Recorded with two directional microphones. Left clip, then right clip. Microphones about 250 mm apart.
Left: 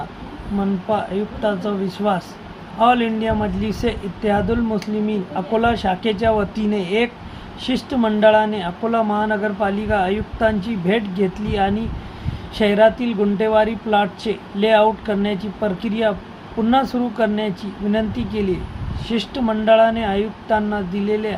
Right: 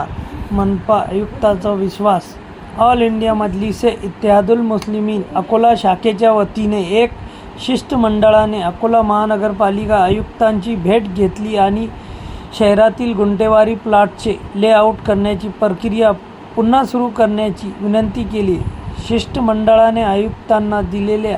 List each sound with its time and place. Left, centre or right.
0.9 s a woman's voice: centre